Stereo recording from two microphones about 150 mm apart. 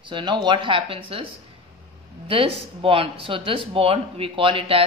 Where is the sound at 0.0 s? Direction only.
30° right (ahead or behind).